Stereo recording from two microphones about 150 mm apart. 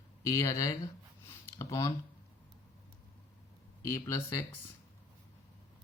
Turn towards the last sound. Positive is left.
turn(degrees=20)  # may be behind; listen again after turning